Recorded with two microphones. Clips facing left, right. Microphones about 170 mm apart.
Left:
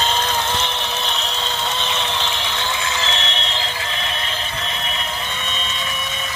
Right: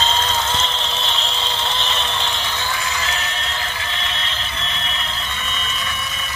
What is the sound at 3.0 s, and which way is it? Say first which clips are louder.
Neigh: left 2 dB; 25° left (ahead or behind).